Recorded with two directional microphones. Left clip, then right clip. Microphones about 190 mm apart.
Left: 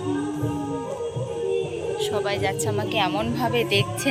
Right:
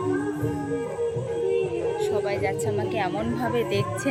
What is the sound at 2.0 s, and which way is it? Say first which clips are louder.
Speech: left 3 dB; 10° right (ahead or behind).